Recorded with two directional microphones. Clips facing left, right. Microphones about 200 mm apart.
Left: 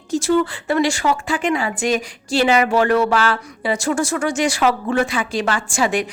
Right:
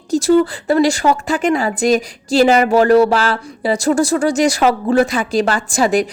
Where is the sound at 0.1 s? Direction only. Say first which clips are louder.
Right 5 dB; 35° right (ahead or behind).